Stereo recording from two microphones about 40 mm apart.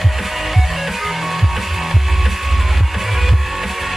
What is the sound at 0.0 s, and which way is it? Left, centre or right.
Music, centre.